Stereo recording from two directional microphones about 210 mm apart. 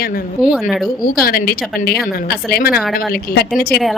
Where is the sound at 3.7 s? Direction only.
Centre (ahead or behind).